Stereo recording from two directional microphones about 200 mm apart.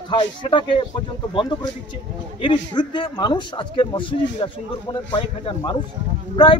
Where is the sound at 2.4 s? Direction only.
25° left (ahead or behind).